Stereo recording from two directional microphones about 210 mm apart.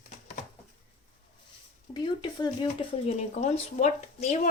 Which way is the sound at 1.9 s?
20° left (ahead or behind).